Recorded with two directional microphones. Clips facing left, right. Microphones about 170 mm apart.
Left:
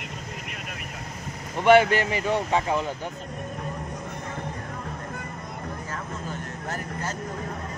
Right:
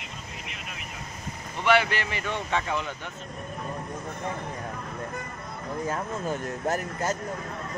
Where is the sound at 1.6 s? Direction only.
45° left (ahead or behind).